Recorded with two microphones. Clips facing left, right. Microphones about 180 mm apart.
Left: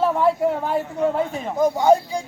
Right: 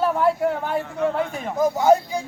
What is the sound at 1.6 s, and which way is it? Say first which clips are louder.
Speech: left 1 dB; 5° right (ahead or behind).